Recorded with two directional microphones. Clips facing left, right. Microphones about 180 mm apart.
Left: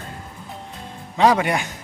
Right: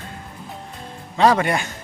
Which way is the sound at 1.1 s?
10° left (ahead or behind).